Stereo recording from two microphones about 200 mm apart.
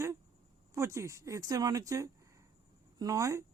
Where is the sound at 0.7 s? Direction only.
15° right (ahead or behind).